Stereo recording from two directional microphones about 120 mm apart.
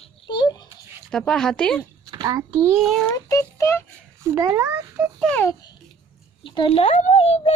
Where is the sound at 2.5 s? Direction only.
20° right (ahead or behind).